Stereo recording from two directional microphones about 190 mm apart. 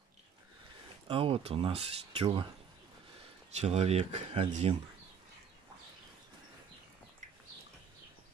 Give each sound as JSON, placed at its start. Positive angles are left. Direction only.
{"t": 1.0, "sound": "speech", "side_deg": -30}
{"t": 3.5, "sound": "speech", "side_deg": -35}